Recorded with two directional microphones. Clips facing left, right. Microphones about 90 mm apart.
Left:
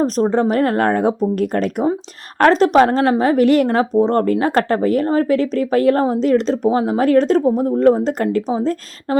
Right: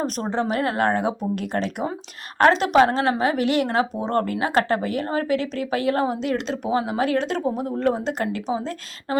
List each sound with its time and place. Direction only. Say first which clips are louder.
0.0 s a woman's voice: left 9 dB; 35° left (ahead or behind)